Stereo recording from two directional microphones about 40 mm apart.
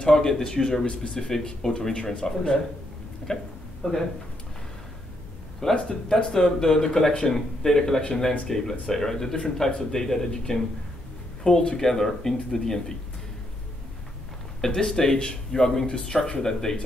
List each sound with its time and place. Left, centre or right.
0.0 s speech: centre
5.6 s speech: centre
14.6 s speech: centre